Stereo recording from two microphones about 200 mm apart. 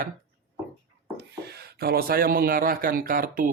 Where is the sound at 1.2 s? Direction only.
55° right (ahead or behind).